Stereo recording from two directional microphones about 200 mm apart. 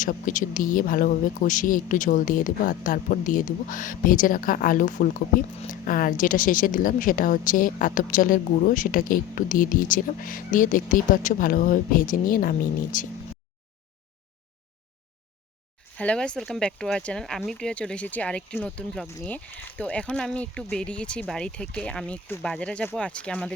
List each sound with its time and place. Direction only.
0.0 s a woman's voice: 40° left (ahead or behind)
16.0 s speech: 5° left (ahead or behind)